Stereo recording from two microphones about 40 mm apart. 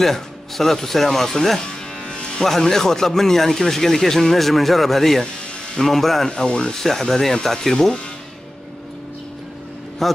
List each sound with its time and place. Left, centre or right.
0.0 s speech: centre
1.6 s music: centre
2.4 s speech: centre
6.8 s speech: centre
10.0 s a man's voice: centre